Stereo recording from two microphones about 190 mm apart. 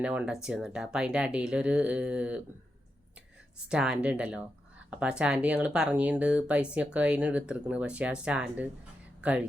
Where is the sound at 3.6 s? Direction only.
5° right (ahead or behind).